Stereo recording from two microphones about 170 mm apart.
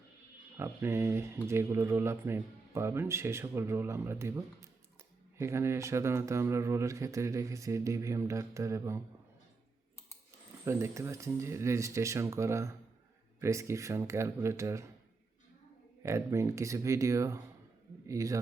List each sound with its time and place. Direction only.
0.5 s speech: 15° right (ahead or behind)
10.7 s speech: 15° right (ahead or behind)
16.0 s a man's voice: 15° right (ahead or behind)